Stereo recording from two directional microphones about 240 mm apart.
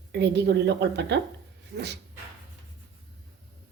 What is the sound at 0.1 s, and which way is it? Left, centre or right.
A woman's voice, right.